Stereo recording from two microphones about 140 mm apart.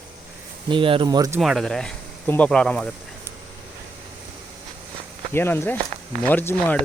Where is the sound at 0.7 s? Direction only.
35° right (ahead or behind).